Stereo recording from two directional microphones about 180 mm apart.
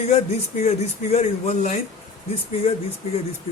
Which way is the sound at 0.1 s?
40° left (ahead or behind).